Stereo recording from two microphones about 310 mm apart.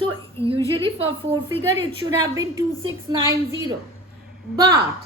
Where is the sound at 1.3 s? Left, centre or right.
Centre.